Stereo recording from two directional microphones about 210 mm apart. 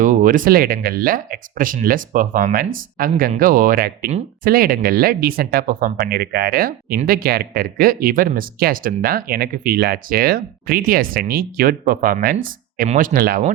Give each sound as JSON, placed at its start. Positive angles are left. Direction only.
{"t": 0.0, "sound": "speech", "side_deg": -40}